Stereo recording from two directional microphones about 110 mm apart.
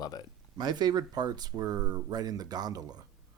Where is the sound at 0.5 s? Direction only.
40° right (ahead or behind).